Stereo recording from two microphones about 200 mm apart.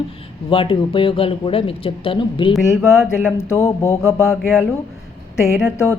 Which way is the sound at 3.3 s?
15° left (ahead or behind).